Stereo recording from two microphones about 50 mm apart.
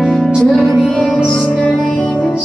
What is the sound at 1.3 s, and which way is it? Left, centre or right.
Music, centre.